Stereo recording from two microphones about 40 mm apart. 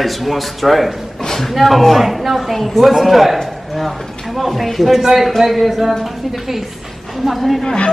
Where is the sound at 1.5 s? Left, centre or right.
Centre.